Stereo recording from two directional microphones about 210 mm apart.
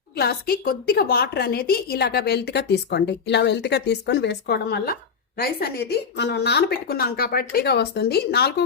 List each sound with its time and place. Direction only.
0.2 s a woman's voice: 45° left (ahead or behind)